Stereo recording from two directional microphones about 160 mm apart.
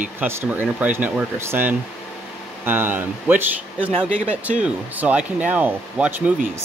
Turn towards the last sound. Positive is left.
turn(degrees=-10)  # may be behind; listen again after turning